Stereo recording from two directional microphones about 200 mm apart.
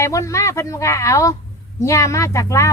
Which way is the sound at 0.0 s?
15° left (ahead or behind).